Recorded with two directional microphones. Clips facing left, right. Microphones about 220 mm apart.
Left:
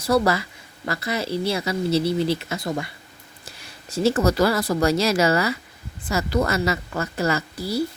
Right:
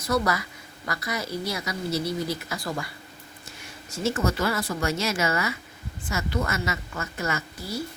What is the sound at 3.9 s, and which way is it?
A woman's voice, 35° left (ahead or behind).